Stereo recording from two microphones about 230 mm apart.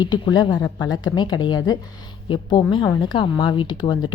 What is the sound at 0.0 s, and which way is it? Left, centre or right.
Speech, centre.